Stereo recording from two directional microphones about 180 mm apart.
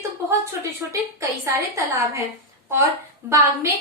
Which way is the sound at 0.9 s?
15° right (ahead or behind).